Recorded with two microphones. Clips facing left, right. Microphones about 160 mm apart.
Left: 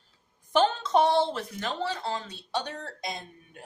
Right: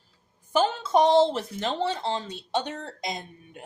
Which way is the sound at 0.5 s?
5° right (ahead or behind).